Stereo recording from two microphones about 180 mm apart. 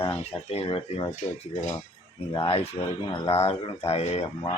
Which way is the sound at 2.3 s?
30° left (ahead or behind).